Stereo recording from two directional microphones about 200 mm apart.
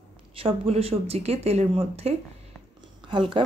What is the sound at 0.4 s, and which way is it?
A woman's voice, 30° right (ahead or behind).